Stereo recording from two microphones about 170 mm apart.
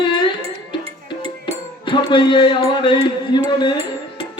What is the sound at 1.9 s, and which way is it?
A man's voice, 25° left (ahead or behind).